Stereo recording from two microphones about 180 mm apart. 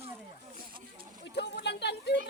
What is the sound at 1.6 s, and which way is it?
Children playing, 70° left (ahead or behind).